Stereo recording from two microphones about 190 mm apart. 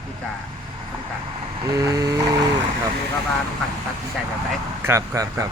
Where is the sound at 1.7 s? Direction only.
20° right (ahead or behind).